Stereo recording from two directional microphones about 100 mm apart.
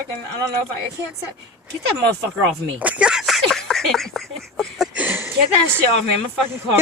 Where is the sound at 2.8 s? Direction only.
15° right (ahead or behind); by 4.9 s 5° left (ahead or behind).